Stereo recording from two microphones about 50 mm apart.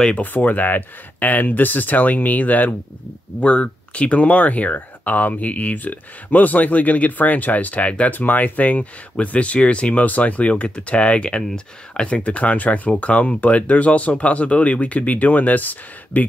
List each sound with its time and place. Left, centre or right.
0.1 s speech: left
3.3 s speech: left
12.2 s speech: left